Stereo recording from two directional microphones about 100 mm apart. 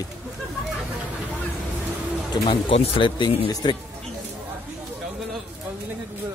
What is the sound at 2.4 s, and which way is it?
Speech, 85° left.